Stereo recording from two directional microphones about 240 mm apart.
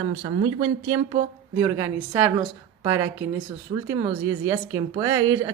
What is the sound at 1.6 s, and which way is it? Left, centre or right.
Speech, centre.